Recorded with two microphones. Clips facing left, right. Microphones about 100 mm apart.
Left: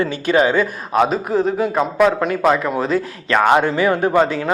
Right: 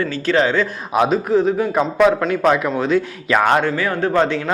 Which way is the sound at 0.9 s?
Centre (ahead or behind).